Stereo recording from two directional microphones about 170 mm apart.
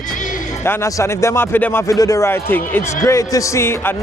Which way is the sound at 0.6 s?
15° left (ahead or behind).